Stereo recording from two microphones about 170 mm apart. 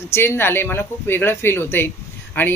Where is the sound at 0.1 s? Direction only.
15° left (ahead or behind).